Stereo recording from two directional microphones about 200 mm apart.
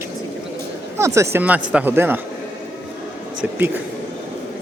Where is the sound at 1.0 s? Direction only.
15° right (ahead or behind).